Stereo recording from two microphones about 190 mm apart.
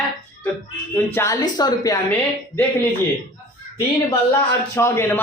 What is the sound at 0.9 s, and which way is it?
Speech, 15° left (ahead or behind).